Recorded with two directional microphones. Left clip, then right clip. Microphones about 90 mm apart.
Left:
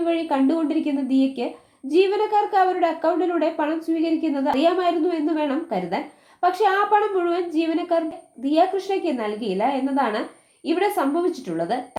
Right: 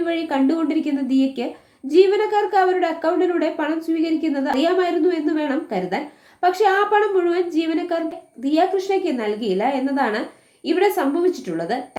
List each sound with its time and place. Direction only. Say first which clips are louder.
0.0 s a woman's voice: right 1 dB; 35° left (ahead or behind)